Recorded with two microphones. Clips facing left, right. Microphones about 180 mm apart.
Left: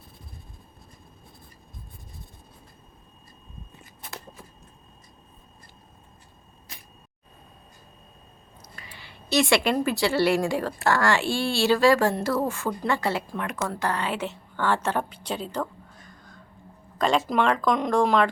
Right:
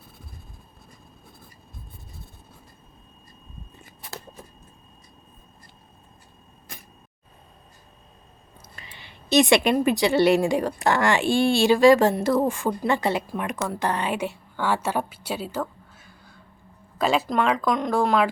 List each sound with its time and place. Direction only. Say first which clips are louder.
8.8 s a woman's voice: even; 20° right (ahead or behind); by 18.3 s 5° right (ahead or behind)